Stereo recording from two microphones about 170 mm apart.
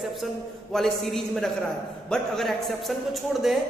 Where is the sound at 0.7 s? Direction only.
Centre (ahead or behind).